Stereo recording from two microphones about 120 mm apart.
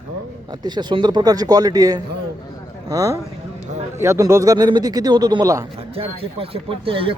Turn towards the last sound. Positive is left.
turn(degrees=-50)  # may be behind; listen again after turning